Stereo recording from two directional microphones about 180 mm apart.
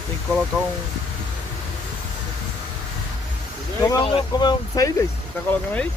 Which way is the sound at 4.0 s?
25° left (ahead or behind).